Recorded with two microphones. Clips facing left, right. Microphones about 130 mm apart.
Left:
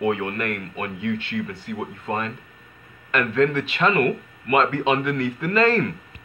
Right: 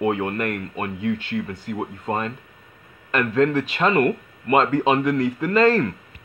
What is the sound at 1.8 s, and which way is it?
Speech, 30° right (ahead or behind).